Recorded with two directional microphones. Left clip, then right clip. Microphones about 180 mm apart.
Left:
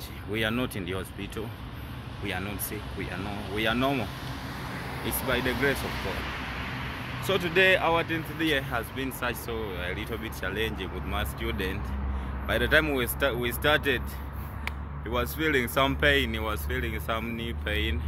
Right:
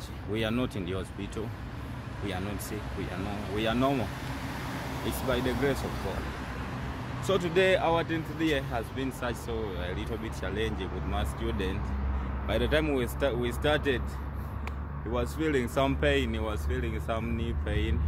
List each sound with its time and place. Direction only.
0.3 s speech: centre (ahead or behind)
3.5 s speech: 5° right (ahead or behind)
5.4 s speech: 60° right (ahead or behind)
7.2 s speech: 10° right (ahead or behind)